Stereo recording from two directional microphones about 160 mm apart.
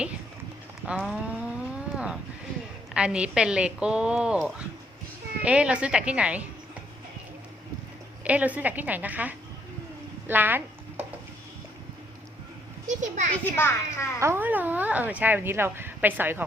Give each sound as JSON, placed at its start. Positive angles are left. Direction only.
{"t": 0.9, "sound": "a sound", "side_deg": -5}
{"t": 2.9, "sound": "a woman's voice", "side_deg": -5}
{"t": 8.2, "sound": "speech", "side_deg": -10}
{"t": 12.9, "sound": "speech", "side_deg": -50}
{"t": 13.3, "sound": "a child's voice", "side_deg": 15}
{"t": 14.2, "sound": "speech", "side_deg": -15}